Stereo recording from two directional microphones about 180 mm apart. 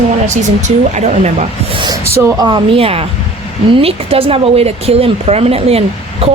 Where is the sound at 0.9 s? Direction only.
40° right (ahead or behind).